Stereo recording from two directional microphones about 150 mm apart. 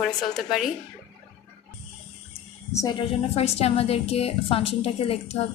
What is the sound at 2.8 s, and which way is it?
A woman's voice, 35° left (ahead or behind).